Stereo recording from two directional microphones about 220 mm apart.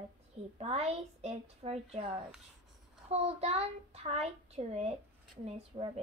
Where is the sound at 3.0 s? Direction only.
30° right (ahead or behind).